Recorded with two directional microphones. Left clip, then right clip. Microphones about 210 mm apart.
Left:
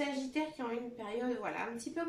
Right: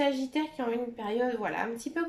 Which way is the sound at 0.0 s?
45° right (ahead or behind).